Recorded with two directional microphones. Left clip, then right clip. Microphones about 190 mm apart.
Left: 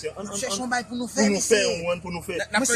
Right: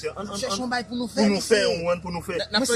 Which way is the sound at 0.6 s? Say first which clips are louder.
Even; 5° right (ahead or behind).